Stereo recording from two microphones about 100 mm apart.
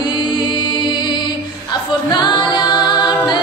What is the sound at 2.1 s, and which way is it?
A capella, 50° left (ahead or behind).